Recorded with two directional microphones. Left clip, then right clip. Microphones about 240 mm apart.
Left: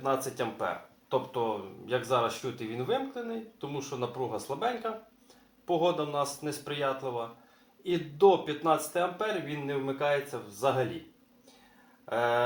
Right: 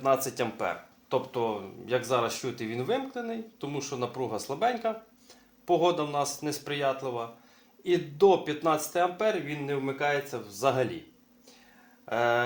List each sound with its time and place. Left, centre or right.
0.0 s speech: right
12.0 s speech: right